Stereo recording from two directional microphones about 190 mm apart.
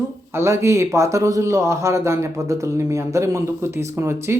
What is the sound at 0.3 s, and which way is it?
A man's voice, 15° right (ahead or behind).